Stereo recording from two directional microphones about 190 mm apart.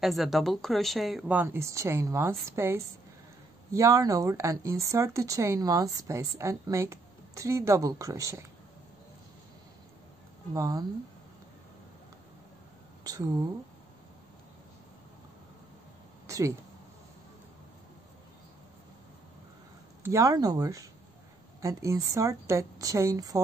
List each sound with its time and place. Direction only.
0.0 s speech: centre (ahead or behind); by 8.5 s 15° right (ahead or behind)
10.5 s speech: 20° right (ahead or behind)
13.0 s speech: 20° right (ahead or behind)
16.3 s a sound: 15° right (ahead or behind)
20.0 s speech: 15° right (ahead or behind)